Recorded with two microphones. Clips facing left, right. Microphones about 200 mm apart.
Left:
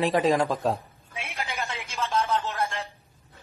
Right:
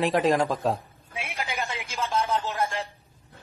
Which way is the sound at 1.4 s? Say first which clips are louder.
Right 1 dB; 15° right (ahead or behind).